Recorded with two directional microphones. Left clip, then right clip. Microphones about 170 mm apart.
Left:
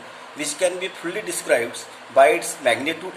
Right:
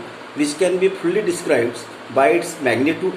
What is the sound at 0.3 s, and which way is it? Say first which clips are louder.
Speech: right 5 dB; 30° left (ahead or behind).